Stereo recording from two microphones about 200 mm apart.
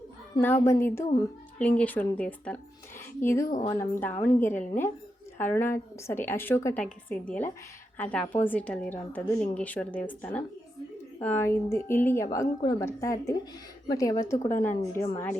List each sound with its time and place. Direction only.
0.4 s a woman's voice: 10° left (ahead or behind)
3.5 s a woman's voice: 30° left (ahead or behind)
3.8 s a woman's voice: 10° left (ahead or behind)